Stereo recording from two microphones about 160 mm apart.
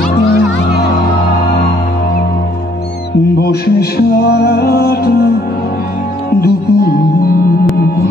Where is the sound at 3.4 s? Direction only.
85° left.